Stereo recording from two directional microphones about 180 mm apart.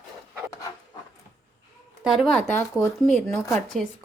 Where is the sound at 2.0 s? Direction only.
Centre (ahead or behind).